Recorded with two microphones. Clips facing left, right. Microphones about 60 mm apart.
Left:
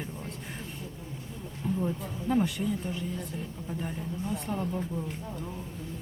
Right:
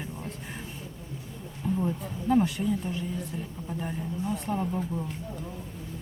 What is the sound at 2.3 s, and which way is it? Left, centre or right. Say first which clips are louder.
Speech: right 3 dB; centre.